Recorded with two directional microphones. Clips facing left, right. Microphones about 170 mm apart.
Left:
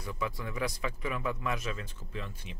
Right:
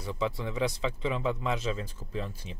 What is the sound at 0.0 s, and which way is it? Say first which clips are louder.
Speech: right 5 dB; 25° right (ahead or behind).